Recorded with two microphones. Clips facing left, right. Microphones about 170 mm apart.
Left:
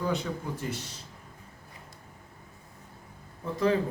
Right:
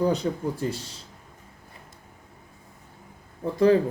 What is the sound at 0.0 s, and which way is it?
Speech, 35° right (ahead or behind).